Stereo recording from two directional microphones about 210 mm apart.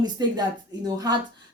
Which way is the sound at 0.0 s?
20° right (ahead or behind).